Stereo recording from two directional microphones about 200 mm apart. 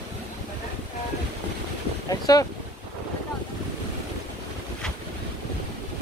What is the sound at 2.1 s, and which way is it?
Boat, 20° left (ahead or behind).